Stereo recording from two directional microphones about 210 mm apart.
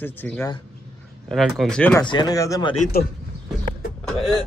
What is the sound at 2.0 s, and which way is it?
Speech, 20° left (ahead or behind).